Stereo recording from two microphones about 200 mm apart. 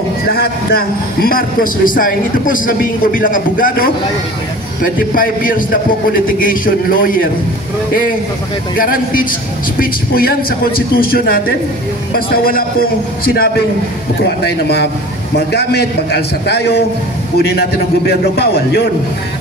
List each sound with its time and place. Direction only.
0.3 s a man's voice: 50° left (ahead or behind)
5.1 s a man's voice: 45° left (ahead or behind)
8.7 s a man's voice: 45° left (ahead or behind)